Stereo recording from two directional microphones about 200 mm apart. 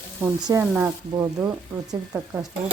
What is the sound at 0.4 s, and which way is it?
Speech, 15° right (ahead or behind).